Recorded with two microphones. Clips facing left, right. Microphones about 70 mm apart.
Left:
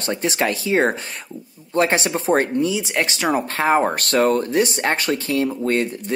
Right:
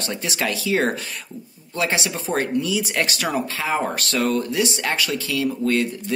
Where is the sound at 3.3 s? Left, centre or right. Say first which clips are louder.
Left 7 dB; left.